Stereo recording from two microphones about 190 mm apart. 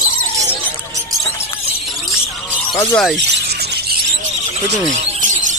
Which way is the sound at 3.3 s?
60° right (ahead or behind).